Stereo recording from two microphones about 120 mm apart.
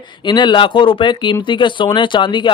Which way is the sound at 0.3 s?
40° left (ahead or behind).